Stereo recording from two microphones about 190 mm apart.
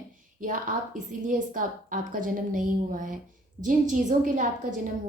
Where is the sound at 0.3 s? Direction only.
45° right (ahead or behind).